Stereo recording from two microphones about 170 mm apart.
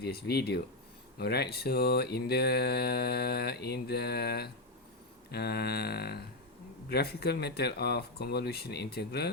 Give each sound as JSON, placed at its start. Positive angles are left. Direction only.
{"t": 0.0, "sound": "speech", "side_deg": 70}